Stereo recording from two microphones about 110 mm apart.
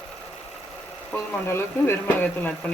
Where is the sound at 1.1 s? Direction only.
20° left (ahead or behind).